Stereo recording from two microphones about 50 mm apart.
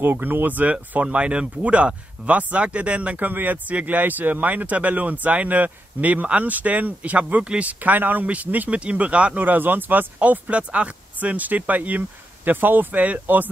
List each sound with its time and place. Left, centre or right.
0.0 s speech: right
9.4 s speech: right